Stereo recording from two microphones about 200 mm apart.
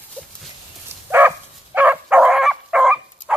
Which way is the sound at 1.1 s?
10° right (ahead or behind).